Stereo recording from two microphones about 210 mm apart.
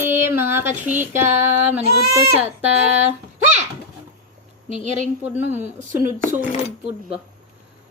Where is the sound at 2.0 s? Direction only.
5° right (ahead or behind).